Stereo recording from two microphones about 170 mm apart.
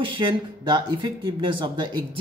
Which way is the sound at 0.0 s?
30° right (ahead or behind).